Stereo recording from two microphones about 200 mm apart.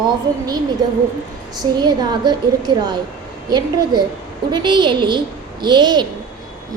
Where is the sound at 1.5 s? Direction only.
20° right (ahead or behind).